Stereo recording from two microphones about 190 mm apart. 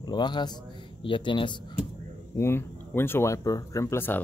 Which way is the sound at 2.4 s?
10° left (ahead or behind).